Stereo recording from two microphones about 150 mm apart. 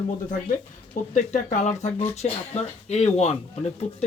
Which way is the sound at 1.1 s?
55° left (ahead or behind).